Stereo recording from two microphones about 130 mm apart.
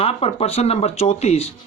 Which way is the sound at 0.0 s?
50° left (ahead or behind).